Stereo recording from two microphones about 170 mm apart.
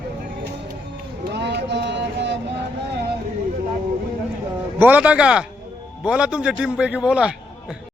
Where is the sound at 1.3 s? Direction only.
85° right.